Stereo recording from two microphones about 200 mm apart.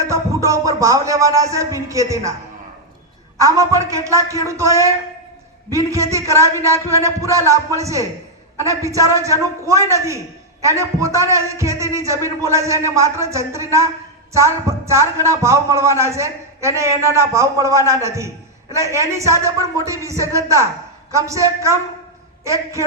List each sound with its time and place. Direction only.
0.0 s a man's voice: 15° right (ahead or behind)
3.3 s a man's voice: 15° right (ahead or behind)